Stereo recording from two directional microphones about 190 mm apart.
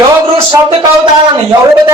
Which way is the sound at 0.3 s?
25° right (ahead or behind).